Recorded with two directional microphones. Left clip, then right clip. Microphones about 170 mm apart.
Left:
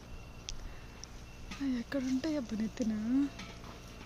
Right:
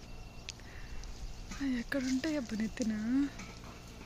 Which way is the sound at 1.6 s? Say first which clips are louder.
Right 1 dB; 10° left (ahead or behind).